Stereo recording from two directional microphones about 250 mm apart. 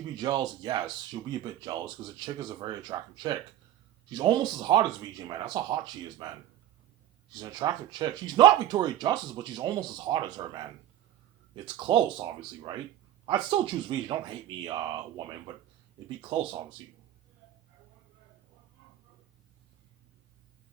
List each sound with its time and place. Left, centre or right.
0.2 s speech: centre
7.3 s speech: centre